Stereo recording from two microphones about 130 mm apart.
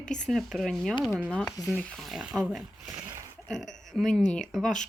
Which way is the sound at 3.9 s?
Centre (ahead or behind).